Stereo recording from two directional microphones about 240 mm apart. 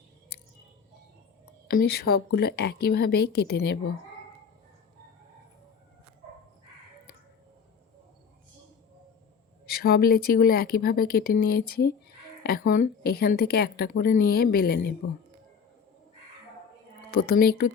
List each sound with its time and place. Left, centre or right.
1.6 s speech: left
9.6 s a woman's voice: left
17.2 s a woman's voice: left